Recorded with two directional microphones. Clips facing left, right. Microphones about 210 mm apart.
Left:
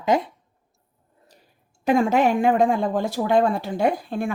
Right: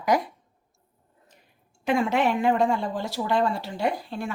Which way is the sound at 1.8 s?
40° left (ahead or behind).